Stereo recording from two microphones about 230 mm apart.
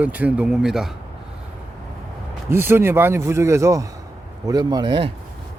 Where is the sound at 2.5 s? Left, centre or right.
Centre.